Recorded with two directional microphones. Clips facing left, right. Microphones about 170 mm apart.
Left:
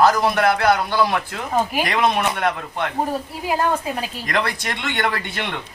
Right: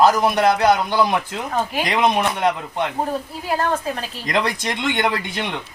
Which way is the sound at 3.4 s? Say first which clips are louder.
Left 1 dB; 10° left (ahead or behind).